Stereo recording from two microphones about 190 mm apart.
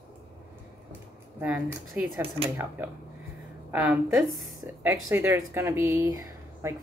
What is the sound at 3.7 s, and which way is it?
A woman's voice, 10° right (ahead or behind).